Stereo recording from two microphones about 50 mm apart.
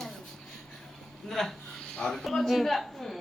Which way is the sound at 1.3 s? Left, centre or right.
Centre.